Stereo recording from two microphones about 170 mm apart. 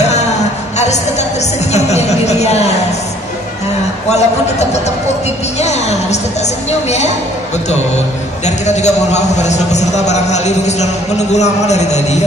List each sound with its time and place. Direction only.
1.7 s a sound: 40° left (ahead or behind)
4.1 s a man's voice: 40° left (ahead or behind)
8.5 s a man's voice: 40° left (ahead or behind)